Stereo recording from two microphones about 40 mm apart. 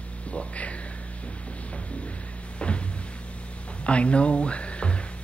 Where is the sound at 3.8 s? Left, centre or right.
Left.